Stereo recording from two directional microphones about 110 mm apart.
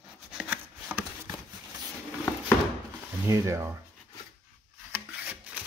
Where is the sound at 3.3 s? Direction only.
25° right (ahead or behind).